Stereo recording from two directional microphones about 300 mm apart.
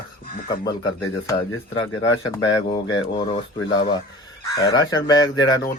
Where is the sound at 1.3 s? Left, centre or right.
Centre.